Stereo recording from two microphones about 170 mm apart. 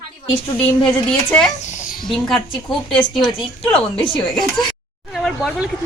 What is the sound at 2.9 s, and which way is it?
Speech, 30° left (ahead or behind).